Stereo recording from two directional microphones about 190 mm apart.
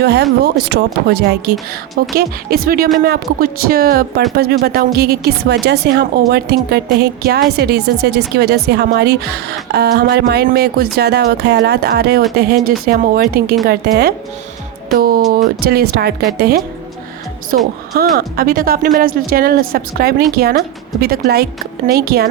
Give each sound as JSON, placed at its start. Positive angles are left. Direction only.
{"t": 0.0, "sound": "a woman's voice", "side_deg": -60}
{"t": 17.5, "sound": "a woman's voice", "side_deg": -50}